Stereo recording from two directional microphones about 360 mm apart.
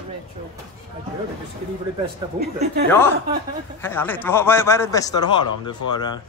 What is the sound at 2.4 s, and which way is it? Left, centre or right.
Speech, right.